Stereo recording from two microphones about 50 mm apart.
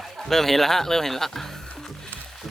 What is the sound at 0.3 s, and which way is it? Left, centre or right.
Speech, centre.